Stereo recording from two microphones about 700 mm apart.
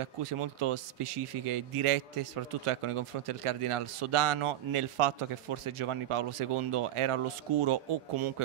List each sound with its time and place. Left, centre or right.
0.0 s speech: right